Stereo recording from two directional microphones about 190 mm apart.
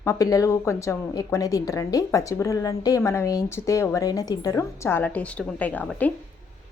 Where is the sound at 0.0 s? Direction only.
15° left (ahead or behind).